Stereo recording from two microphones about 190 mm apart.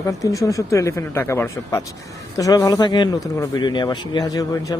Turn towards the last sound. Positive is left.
turn(degrees=20)  # may be behind; listen again after turning